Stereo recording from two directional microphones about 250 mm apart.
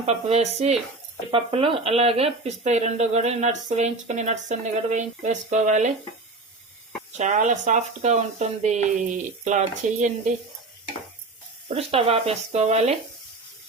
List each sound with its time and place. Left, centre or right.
0.0 s speech: right
7.2 s speech: right
11.7 s speech: right